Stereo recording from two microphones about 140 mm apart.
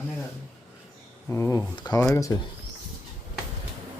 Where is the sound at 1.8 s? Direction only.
30° left (ahead or behind).